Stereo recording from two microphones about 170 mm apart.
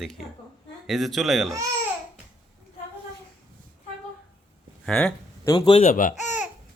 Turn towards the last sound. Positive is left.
turn(degrees=50)  # may be behind; listen again after turning